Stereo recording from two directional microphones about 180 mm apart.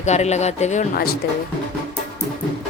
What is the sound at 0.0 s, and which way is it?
Speech, 40° left (ahead or behind).